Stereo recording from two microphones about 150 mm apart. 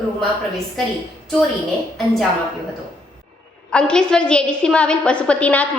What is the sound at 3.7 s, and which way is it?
A woman's voice, 5° left (ahead or behind).